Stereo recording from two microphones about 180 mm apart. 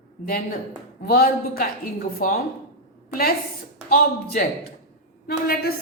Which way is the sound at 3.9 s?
55° left (ahead or behind).